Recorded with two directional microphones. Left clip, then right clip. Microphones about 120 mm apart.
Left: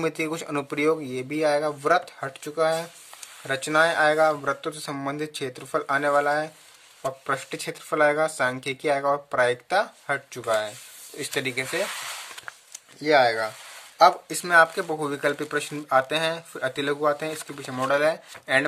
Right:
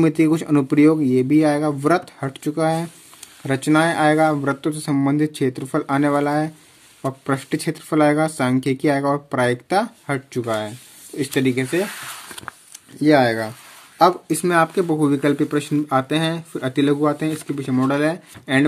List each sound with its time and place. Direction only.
0.0 s speech: 20° right (ahead or behind)
10.4 s speech: 15° right (ahead or behind)
12.5 s a sound: 60° right (ahead or behind)
13.0 s speech: 35° right (ahead or behind)
13.9 s speech: 20° right (ahead or behind)